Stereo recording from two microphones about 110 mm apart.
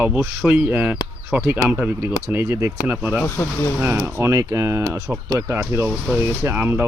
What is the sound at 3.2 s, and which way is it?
Speech, 25° left (ahead or behind).